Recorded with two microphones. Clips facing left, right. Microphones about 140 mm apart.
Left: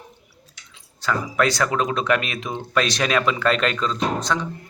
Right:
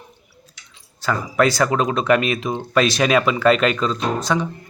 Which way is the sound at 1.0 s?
5° right (ahead or behind).